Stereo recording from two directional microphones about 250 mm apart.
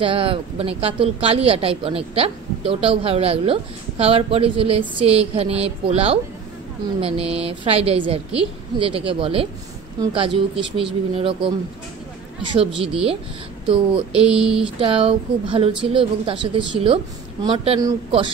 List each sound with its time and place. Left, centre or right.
0.0 s speech: right
12.5 s speech: right
14.2 s speech: centre
14.6 s speech: right